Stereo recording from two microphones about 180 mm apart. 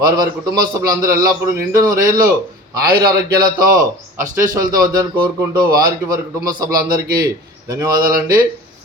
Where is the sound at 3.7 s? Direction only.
50° right (ahead or behind).